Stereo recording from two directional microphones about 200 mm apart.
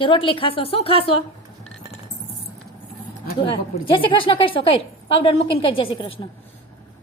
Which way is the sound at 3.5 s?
25° left (ahead or behind).